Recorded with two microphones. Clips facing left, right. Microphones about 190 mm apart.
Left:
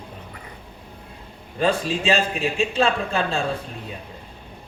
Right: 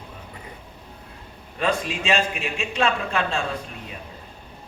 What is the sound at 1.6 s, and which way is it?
A man's voice, 30° left (ahead or behind).